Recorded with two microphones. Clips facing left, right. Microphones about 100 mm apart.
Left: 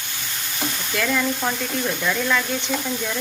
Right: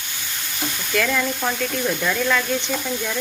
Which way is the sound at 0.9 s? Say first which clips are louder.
Right 1 dB; 5° left (ahead or behind).